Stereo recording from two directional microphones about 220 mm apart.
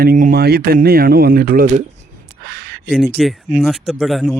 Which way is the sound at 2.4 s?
50° right (ahead or behind).